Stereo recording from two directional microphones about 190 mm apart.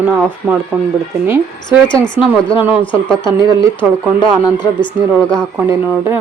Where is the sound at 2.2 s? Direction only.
10° right (ahead or behind).